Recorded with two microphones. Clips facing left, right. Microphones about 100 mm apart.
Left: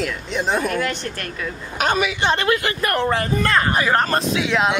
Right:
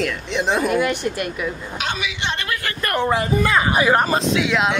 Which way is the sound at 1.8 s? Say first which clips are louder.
Left 7 dB; 45° left (ahead or behind).